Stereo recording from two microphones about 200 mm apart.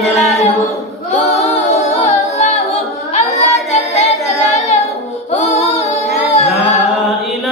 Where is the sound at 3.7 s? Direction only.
30° left (ahead or behind).